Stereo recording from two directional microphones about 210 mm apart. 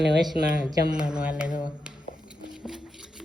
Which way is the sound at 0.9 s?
5° right (ahead or behind).